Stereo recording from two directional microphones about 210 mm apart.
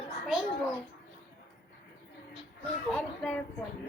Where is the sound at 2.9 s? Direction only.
5° left (ahead or behind).